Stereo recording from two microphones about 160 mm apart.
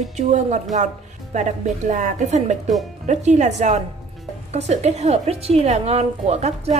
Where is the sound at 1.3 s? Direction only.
50° right (ahead or behind).